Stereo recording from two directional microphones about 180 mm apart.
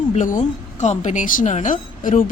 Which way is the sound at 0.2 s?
45° left (ahead or behind).